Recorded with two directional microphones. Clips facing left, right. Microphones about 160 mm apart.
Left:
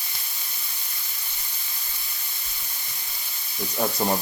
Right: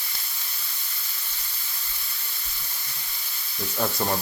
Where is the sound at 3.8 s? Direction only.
15° left (ahead or behind).